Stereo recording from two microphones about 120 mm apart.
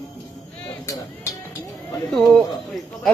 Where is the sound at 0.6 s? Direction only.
25° left (ahead or behind).